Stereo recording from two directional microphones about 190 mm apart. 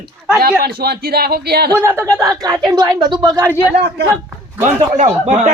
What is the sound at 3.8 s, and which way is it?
Speech, 60° right (ahead or behind).